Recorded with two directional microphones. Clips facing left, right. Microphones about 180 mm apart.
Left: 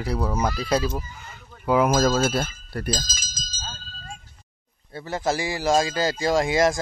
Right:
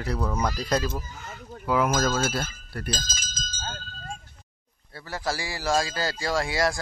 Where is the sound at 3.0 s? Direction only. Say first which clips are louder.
Right 2 dB; 60° right (ahead or behind).